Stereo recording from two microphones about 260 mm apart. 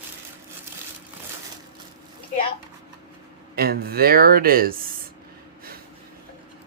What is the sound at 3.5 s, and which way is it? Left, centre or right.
A woman's voice, right.